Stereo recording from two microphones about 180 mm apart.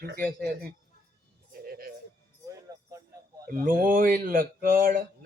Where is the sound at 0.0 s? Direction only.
70° right (ahead or behind).